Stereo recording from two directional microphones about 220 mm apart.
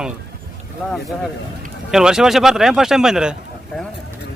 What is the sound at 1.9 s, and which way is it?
Speech, centre (ahead or behind).